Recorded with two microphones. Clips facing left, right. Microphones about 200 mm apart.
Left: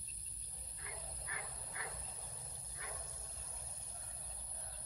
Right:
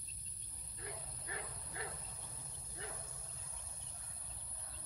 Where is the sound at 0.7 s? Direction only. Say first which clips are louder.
Right 3 dB; 30° right (ahead or behind).